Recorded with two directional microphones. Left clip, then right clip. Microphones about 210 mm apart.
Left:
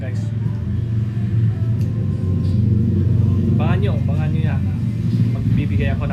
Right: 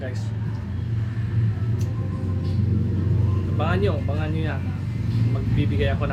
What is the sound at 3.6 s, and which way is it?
Speech, 15° left (ahead or behind).